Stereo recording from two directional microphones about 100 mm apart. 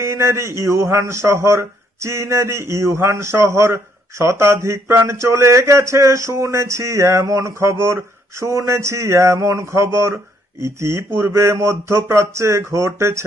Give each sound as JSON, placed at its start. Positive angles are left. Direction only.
{"t": 0.0, "sound": "speech", "side_deg": -25}